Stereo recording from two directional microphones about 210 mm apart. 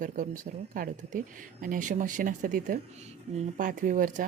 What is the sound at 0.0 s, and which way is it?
Speech, 40° right (ahead or behind).